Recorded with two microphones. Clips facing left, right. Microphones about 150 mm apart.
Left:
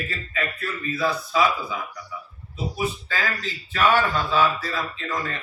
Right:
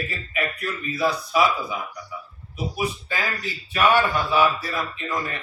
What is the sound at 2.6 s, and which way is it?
Speech, 15° right (ahead or behind).